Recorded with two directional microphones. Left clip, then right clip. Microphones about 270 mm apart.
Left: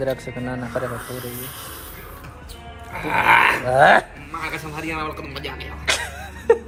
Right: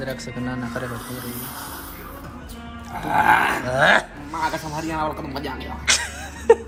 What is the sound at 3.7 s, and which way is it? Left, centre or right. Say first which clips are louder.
Speech: left 3 dB; centre.